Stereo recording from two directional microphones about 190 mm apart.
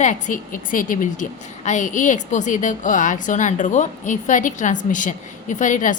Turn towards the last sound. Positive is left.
turn(degrees=40)  # may be behind; listen again after turning